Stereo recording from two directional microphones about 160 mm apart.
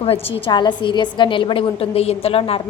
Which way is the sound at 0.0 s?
35° left (ahead or behind).